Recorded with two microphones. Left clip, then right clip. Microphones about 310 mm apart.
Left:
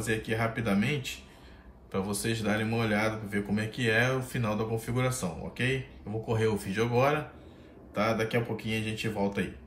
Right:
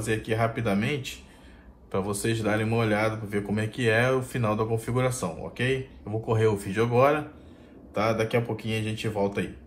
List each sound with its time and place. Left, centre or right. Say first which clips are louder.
0.0 s a man's voice: right 4 dB; centre